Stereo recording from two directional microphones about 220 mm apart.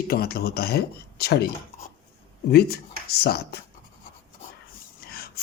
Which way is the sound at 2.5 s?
45° left (ahead or behind).